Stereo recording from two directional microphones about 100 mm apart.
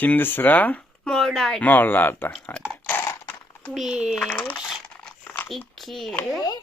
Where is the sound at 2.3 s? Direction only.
10° left (ahead or behind).